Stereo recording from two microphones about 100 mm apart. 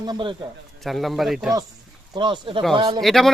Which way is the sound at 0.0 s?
50° right (ahead or behind).